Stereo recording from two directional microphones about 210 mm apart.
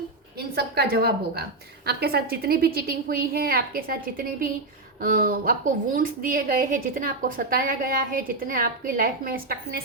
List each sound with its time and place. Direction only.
0.3 s a woman's voice: 50° right (ahead or behind)